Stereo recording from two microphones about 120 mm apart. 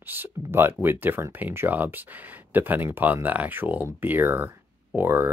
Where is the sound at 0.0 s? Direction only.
15° right (ahead or behind).